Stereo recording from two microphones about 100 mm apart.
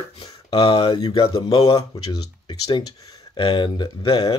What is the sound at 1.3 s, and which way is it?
Speech, 45° left (ahead or behind).